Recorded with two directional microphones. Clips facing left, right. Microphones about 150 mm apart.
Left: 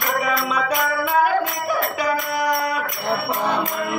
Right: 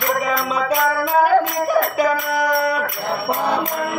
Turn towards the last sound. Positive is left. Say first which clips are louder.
# right 3 dB
turn(degrees=-50)  # may be behind; listen again after turning